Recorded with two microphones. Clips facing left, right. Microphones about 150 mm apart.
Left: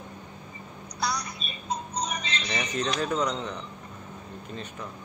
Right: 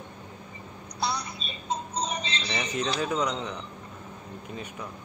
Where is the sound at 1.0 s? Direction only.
25° right (ahead or behind).